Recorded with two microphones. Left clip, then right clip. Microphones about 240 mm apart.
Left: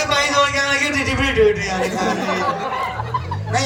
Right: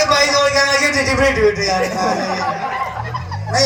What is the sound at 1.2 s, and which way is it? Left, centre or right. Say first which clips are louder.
Speech: right 2 dB; centre.